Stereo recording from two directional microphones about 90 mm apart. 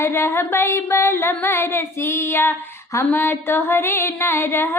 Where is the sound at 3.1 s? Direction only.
25° left (ahead or behind).